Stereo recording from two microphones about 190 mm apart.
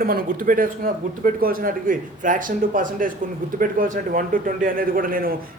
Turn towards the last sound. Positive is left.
turn(degrees=-50)  # may be behind; listen again after turning